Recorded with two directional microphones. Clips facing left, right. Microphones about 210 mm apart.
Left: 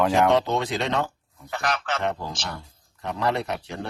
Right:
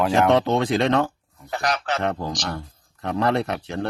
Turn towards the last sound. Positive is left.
turn(degrees=-60)  # may be behind; listen again after turning